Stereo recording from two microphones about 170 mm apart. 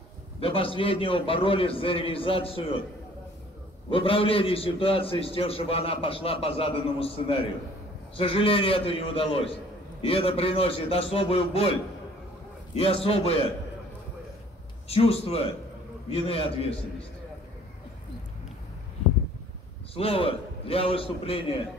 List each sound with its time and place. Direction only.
0.4 s a man's voice: 35° left (ahead or behind)
3.9 s a man's voice: 30° left (ahead or behind)
12.7 s a man's voice: 35° left (ahead or behind)
14.9 s a man's voice: 35° left (ahead or behind)
19.9 s a man's voice: 35° left (ahead or behind)